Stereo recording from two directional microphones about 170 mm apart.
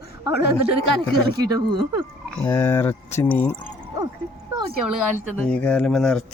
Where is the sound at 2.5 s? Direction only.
15° left (ahead or behind).